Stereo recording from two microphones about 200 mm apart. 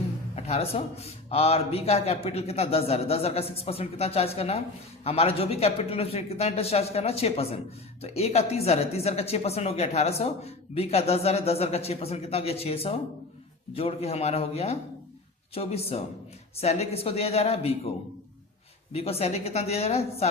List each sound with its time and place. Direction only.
0.3 s speech: 30° left (ahead or behind)
18.9 s speech: 30° left (ahead or behind)